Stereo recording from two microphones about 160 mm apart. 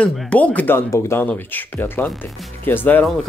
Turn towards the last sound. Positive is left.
turn(degrees=5)  # may be behind; listen again after turning